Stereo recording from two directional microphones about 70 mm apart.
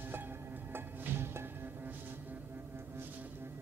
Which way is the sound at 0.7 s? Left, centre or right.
Right.